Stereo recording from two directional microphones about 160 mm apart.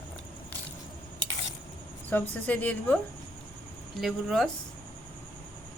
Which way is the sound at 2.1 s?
10° left (ahead or behind).